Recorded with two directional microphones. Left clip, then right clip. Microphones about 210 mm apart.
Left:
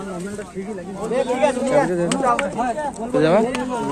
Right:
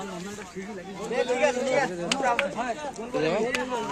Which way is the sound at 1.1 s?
50° right (ahead or behind).